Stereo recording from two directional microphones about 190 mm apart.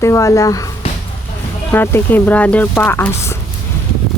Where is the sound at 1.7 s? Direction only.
10° left (ahead or behind).